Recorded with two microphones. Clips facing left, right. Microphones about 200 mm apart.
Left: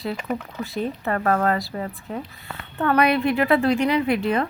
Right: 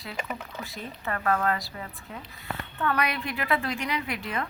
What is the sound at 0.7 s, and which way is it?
Speech, 40° left (ahead or behind).